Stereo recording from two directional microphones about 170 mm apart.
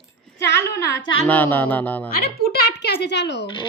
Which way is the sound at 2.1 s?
65° left (ahead or behind).